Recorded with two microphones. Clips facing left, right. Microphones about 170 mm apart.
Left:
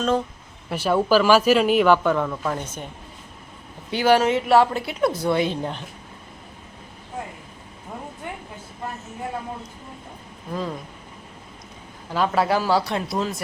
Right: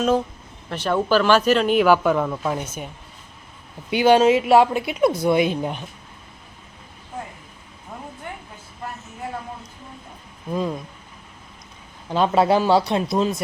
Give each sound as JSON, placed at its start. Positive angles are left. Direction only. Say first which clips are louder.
{"t": 0.7, "sound": "speech", "louder": "left 1 dB", "side_deg": 5}
{"t": 3.9, "sound": "speech", "louder": "right 3 dB", "side_deg": -20}
{"t": 12.1, "sound": "speech", "louder": "right 3 dB", "side_deg": -25}